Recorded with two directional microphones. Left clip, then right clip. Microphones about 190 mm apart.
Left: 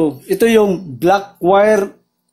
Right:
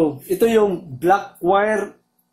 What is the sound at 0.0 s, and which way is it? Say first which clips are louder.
Speech: left 3 dB; 50° left (ahead or behind).